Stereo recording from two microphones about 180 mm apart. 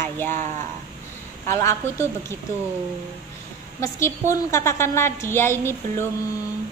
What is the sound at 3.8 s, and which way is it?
A woman's voice, 15° left (ahead or behind).